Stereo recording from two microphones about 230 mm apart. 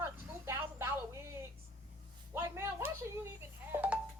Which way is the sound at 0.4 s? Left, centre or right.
Centre.